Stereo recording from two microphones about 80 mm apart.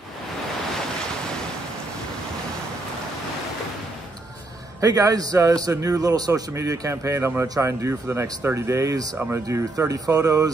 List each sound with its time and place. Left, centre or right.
4.7 s a man's voice: right